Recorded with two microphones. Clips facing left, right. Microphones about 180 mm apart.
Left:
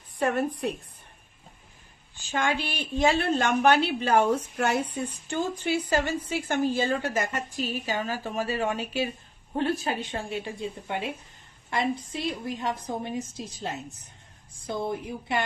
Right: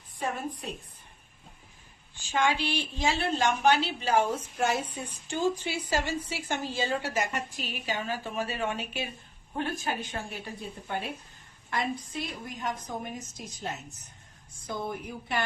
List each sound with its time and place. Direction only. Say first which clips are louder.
0.2 s a woman's voice: left 8 dB; 65° left (ahead or behind)
2.2 s a woman's voice: even; 50° left (ahead or behind); by 15.4 s 25° left (ahead or behind)